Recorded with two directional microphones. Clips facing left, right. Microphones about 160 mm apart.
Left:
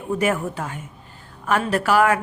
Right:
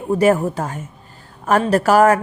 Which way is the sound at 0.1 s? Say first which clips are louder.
Right 7 dB; 35° right (ahead or behind).